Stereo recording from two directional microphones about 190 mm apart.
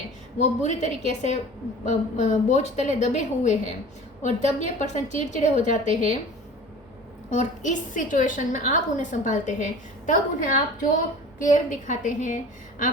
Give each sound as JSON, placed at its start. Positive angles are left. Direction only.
{"t": 0.3, "sound": "a woman's voice", "side_deg": 35}
{"t": 7.3, "sound": "a woman's voice", "side_deg": 40}